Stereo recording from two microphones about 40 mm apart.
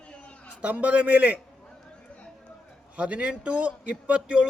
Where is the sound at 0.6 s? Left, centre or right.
Right.